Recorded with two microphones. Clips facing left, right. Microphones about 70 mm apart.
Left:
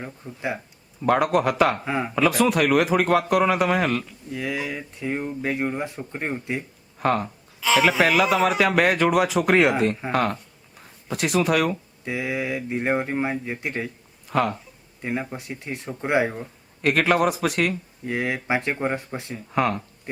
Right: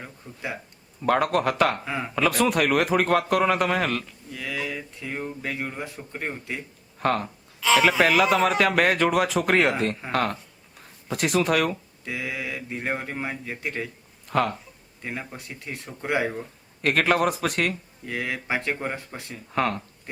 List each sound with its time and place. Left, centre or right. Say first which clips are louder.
0.0 s speech: left 5 dB; centre
1.0 s speech: left 2 dB; centre
1.9 s speech: left 4 dB; centre
2.1 s speech: left 2 dB; centre
4.3 s speech: left 3 dB; centre
7.0 s speech: left 2 dB; centre
12.0 s speech: left 5 dB; left
14.3 s speech: left 1 dB; centre
15.0 s speech: left 6 dB; centre
16.3 s speech: even; centre
18.0 s speech: left 4 dB; left
19.5 s speech: left 2 dB; centre